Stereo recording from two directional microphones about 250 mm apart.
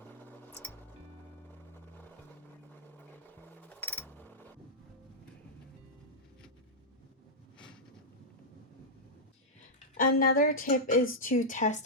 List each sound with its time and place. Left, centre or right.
0.0 s sewing machine: centre
3.5 s music: centre
10.0 s a woman's voice: left